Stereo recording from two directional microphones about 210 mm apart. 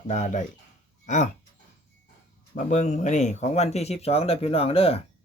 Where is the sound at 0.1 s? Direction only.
35° left (ahead or behind).